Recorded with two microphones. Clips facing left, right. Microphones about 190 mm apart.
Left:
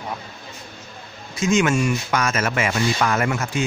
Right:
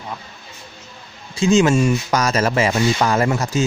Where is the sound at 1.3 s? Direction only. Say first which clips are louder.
Right 4 dB; 30° right (ahead or behind).